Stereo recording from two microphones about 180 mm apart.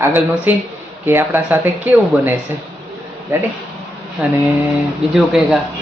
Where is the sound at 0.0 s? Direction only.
15° right (ahead or behind).